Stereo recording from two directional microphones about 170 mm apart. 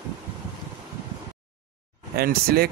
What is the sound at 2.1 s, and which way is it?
Speech, 65° right (ahead or behind).